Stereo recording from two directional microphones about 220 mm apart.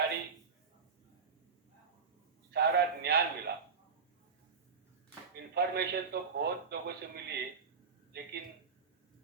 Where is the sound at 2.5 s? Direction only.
50° right (ahead or behind).